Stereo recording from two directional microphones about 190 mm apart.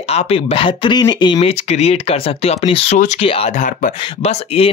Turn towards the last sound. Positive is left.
turn(degrees=35)  # may be behind; listen again after turning